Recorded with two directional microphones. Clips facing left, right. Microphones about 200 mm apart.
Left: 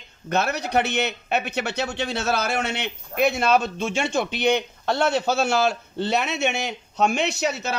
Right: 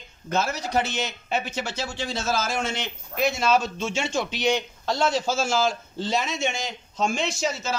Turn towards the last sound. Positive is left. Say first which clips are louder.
# left 3 dB
turn(degrees=65)  # may be behind; listen again after turning